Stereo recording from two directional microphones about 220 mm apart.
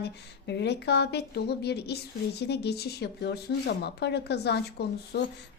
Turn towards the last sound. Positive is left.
turn(degrees=50)  # may be behind; listen again after turning